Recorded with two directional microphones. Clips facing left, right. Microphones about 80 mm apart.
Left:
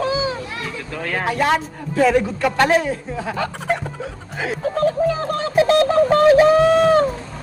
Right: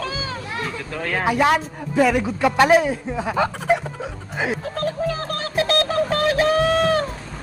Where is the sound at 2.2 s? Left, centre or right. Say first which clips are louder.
Right 1 dB; centre.